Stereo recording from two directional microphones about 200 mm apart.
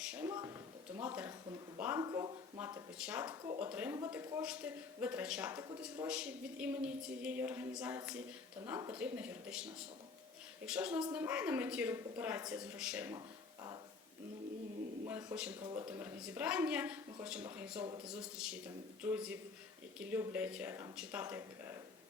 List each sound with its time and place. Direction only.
0.0 s a sound: 5° right (ahead or behind)
0.3 s speech: 20° right (ahead or behind)
2.0 s speech: 20° right (ahead or behind)
3.0 s speech: 5° right (ahead or behind)
3.2 s speech: 20° right (ahead or behind)
3.6 s speech: 10° right (ahead or behind)
4.4 s speech: 5° right (ahead or behind)
5.5 s speech: 20° right (ahead or behind)
6.1 s a woman's voice: 5° right (ahead or behind)
10.7 s a woman's voice: 5° right (ahead or behind)
15.0 s a sound: 10° right (ahead or behind)
15.6 s speech: 20° right (ahead or behind)
15.9 s a woman's voice: 10° right (ahead or behind)